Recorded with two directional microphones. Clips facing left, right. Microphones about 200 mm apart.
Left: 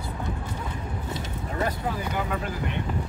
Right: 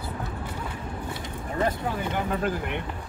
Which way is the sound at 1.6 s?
25° right (ahead or behind).